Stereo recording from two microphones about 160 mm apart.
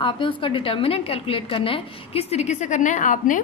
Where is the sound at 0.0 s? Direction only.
30° left (ahead or behind).